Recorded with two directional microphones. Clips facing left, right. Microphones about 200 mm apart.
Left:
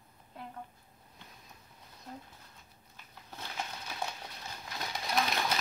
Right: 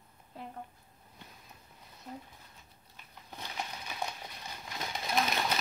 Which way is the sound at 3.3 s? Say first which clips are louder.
Even; 15° right (ahead or behind).